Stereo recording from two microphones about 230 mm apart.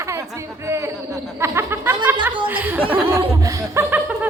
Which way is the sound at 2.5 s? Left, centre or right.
Centre.